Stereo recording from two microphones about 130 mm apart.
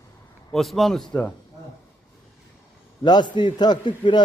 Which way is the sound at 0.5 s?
Centre (ahead or behind).